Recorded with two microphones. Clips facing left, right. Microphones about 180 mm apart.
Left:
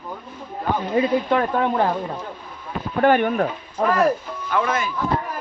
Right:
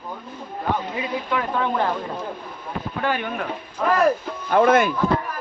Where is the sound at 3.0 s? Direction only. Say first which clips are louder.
Left 9 dB; 50° left (ahead or behind).